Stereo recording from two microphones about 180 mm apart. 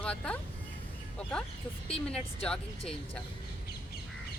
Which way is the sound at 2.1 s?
5° left (ahead or behind).